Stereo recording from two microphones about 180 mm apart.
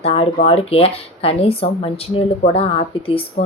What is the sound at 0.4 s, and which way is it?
Speech, 35° left (ahead or behind).